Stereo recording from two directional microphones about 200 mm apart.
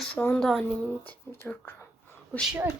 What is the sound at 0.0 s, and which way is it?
Speech, 5° left (ahead or behind).